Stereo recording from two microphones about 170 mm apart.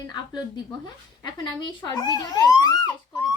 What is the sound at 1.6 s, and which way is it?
A woman's voice, 25° left (ahead or behind).